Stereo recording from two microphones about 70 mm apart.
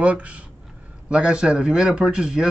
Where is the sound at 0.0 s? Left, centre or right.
Centre.